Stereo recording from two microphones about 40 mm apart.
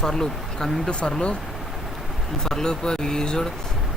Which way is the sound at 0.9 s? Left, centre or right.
Left.